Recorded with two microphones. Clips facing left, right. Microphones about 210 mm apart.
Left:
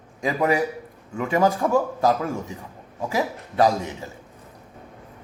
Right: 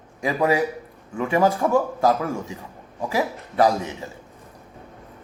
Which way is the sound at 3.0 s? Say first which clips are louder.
Right 1 dB; 20° left (ahead or behind).